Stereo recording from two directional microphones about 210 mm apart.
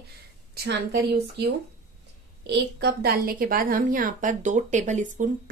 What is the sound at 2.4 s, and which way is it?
A woman's voice, 55° right (ahead or behind).